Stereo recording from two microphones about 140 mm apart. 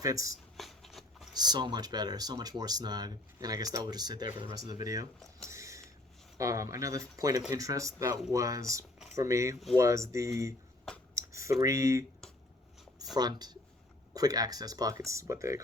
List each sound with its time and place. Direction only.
0.0 s speech: 25° right (ahead or behind)
0.5 s writing: centre (ahead or behind)
1.3 s speech: 30° right (ahead or behind)
5.5 s a sound: 20° right (ahead or behind)
6.3 s speech: 25° right (ahead or behind)
11.1 s a sound: 20° right (ahead or behind)
11.6 s speech: 20° right (ahead or behind)
13.1 s speech: 30° right (ahead or behind)